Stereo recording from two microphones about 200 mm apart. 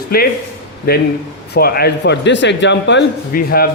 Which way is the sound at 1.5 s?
50° left (ahead or behind).